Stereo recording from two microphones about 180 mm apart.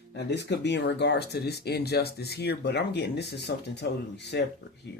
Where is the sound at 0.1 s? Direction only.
65° left (ahead or behind).